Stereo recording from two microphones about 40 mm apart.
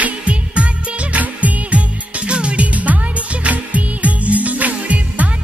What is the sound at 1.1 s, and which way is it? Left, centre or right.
Music, right.